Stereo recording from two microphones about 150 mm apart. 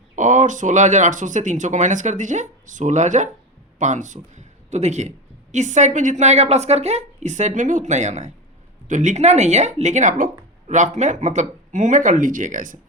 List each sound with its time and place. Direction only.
0.2 s speech: 55° right (ahead or behind)